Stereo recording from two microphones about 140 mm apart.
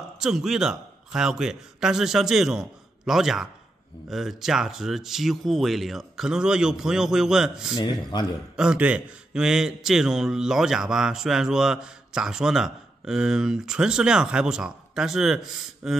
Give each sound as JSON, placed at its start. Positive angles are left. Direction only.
{"t": 0.2, "sound": "a man's voice", "side_deg": -5}
{"t": 7.7, "sound": "speech", "side_deg": 30}
{"t": 8.5, "sound": "a man's voice", "side_deg": -5}